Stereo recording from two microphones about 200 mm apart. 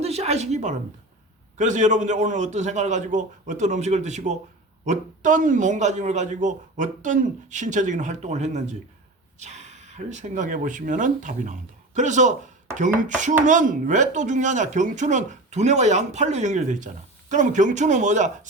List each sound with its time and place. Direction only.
0.0 s a woman's voice: 30° right (ahead or behind)